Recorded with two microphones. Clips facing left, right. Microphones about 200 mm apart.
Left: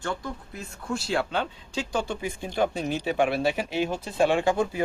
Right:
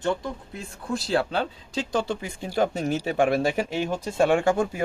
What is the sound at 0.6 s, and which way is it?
Speech, 35° right (ahead or behind).